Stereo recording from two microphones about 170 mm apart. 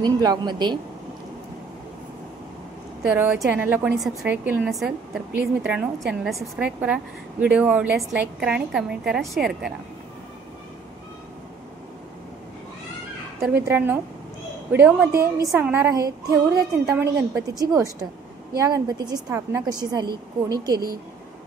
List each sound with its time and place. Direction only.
0.0 s a woman's voice: 25° right (ahead or behind)
3.0 s a woman's voice: 5° right (ahead or behind)
13.4 s a woman's voice: 15° right (ahead or behind)
17.6 s a woman's voice: 20° right (ahead or behind)